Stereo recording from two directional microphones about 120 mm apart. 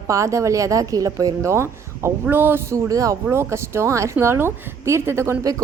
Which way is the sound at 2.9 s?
30° right (ahead or behind).